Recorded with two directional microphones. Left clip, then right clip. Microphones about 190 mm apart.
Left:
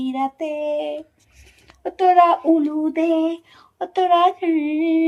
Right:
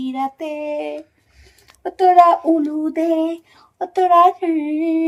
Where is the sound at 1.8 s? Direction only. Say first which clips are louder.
Right 3 dB; 10° right (ahead or behind).